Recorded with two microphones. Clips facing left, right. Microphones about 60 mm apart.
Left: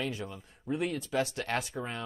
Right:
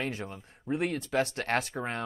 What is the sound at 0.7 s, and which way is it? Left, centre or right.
Speech, right.